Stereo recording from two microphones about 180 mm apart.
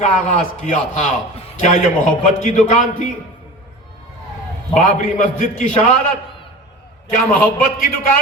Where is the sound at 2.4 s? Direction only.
45° left (ahead or behind).